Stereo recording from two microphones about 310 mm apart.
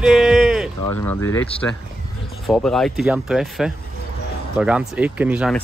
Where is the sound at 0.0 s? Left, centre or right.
Centre.